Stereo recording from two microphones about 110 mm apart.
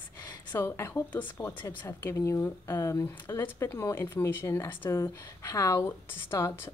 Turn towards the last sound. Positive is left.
turn(degrees=25)  # may be behind; listen again after turning